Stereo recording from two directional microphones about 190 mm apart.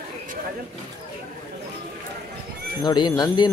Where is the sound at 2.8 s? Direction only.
20° left (ahead or behind).